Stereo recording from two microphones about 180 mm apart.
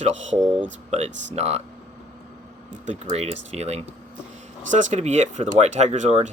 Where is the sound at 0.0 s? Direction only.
40° right (ahead or behind).